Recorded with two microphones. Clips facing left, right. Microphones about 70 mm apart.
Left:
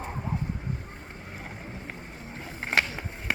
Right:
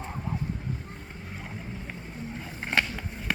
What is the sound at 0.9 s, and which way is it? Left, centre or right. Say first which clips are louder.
Boat: even; centre.